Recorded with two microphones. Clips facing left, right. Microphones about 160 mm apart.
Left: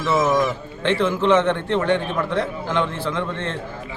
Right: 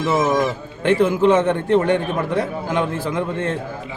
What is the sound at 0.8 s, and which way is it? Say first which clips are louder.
Speech: right 5 dB; 10° right (ahead or behind).